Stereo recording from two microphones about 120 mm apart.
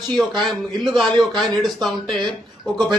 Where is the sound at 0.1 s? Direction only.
Centre (ahead or behind).